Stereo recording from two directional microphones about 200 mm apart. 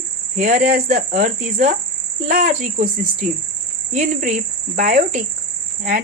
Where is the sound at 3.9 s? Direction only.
40° right (ahead or behind).